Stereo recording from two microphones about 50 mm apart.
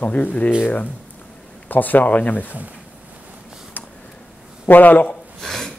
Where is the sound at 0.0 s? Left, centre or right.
Left.